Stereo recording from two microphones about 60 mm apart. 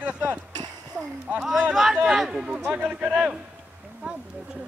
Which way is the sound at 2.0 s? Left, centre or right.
Centre.